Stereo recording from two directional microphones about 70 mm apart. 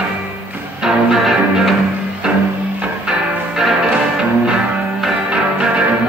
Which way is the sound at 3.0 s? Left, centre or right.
Centre.